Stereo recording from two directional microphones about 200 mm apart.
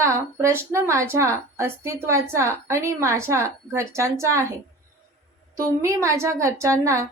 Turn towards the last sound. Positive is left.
turn(degrees=-15)  # may be behind; listen again after turning